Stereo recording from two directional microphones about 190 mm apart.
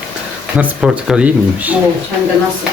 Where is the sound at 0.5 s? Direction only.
5° right (ahead or behind).